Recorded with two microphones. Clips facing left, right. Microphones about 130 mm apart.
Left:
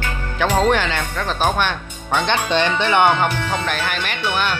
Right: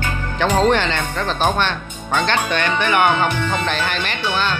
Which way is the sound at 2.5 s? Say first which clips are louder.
Left 4 dB; 25° left (ahead or behind).